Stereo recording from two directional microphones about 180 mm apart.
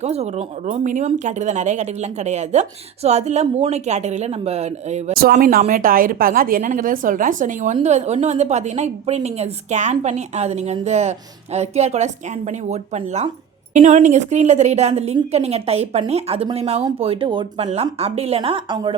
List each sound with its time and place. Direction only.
0.0 s speech: 35° right (ahead or behind)
5.1 s a woman's voice: 55° right (ahead or behind); by 18.9 s 25° right (ahead or behind)